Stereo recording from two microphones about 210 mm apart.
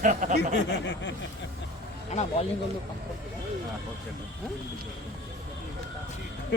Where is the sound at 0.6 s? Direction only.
55° left (ahead or behind).